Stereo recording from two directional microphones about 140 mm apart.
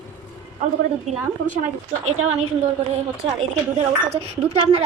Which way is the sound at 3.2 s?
40° right (ahead or behind).